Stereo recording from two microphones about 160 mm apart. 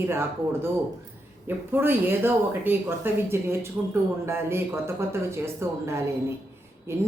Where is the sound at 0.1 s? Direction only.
15° right (ahead or behind).